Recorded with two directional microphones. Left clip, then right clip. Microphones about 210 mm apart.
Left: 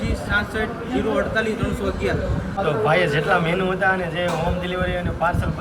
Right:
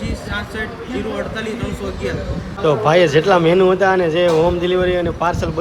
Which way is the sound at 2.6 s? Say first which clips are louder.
Right 6 dB; 15° right (ahead or behind).